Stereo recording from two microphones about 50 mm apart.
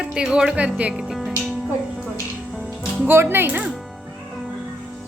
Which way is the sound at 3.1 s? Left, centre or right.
Right.